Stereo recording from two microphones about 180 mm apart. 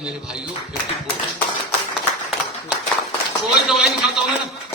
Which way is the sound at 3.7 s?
Centre (ahead or behind).